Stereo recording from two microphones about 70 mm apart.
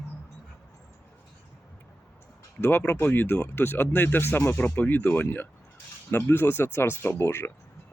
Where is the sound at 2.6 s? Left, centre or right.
Left.